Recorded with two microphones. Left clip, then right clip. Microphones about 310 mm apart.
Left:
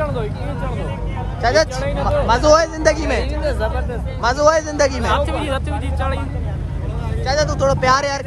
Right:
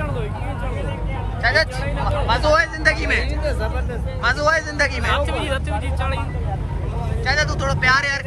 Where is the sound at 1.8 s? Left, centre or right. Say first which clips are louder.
Left 5 dB; left.